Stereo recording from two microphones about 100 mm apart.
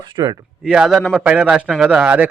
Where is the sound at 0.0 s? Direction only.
50° right (ahead or behind).